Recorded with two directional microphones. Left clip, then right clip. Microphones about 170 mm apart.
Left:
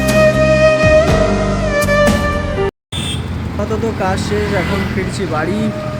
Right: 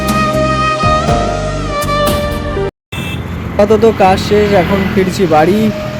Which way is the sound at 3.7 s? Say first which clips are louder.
Right 9 dB; 25° right (ahead or behind).